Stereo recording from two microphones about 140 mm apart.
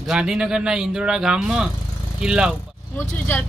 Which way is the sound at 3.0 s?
15° left (ahead or behind).